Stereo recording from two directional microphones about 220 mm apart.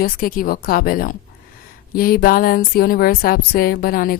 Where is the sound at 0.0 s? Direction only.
40° left (ahead or behind).